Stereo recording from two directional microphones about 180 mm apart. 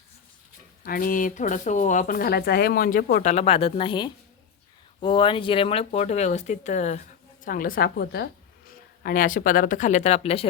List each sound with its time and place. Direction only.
0.9 s speech: 50° left (ahead or behind)
3.2 s a woman's voice: 35° left (ahead or behind)